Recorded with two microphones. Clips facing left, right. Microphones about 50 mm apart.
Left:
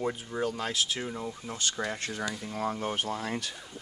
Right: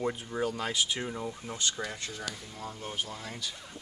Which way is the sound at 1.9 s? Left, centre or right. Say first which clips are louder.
Left 5 dB; left.